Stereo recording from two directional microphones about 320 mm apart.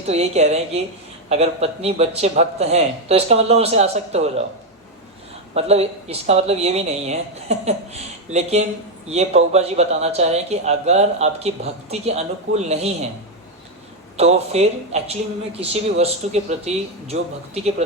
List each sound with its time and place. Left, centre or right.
0.1 s speech: centre
5.5 s speech: centre
14.2 s speech: centre